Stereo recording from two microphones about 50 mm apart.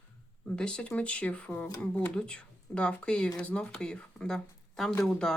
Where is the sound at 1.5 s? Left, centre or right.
Left.